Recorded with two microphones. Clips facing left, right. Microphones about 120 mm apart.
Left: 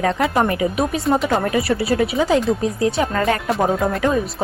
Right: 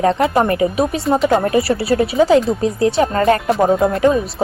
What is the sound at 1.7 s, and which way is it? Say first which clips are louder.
A woman's voice: right 2 dB; 35° right (ahead or behind).